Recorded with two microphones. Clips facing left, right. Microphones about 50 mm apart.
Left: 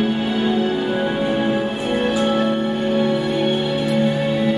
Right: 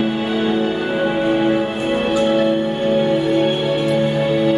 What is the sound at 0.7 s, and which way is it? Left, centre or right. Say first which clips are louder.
Music: right 2 dB; right.